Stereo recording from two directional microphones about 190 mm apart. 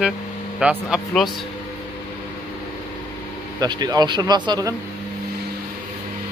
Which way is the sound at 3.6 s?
20° right (ahead or behind).